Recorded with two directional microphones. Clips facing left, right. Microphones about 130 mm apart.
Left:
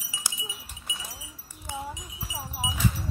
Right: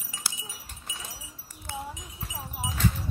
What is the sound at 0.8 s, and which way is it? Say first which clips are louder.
Wind chime: left 1 dB; centre (ahead or behind).